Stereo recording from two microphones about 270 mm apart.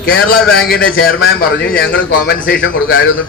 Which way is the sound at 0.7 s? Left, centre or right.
Left.